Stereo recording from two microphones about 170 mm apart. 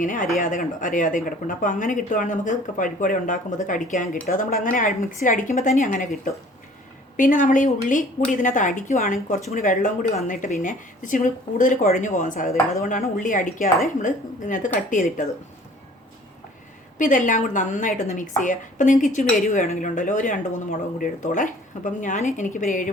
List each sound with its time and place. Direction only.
0.0 s speech: 50° left (ahead or behind)
7.2 s speech: 50° left (ahead or behind)
17.0 s speech: 50° left (ahead or behind)